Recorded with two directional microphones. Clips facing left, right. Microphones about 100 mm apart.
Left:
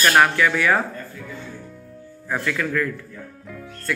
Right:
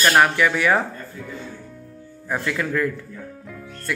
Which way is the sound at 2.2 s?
20° right (ahead or behind).